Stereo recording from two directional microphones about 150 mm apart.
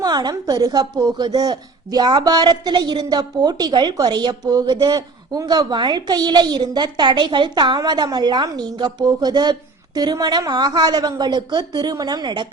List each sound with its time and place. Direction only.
0.0 s a woman's voice: 25° right (ahead or behind)